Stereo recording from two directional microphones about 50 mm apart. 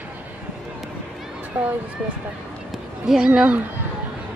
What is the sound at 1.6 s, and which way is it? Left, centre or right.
Speech, right.